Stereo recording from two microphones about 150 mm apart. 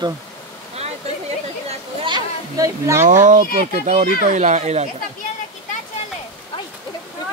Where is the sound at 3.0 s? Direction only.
60° right (ahead or behind).